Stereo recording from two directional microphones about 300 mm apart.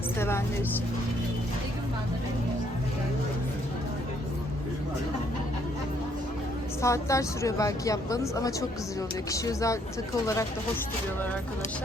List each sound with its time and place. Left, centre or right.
0.2 s speech: centre
6.8 s speech: centre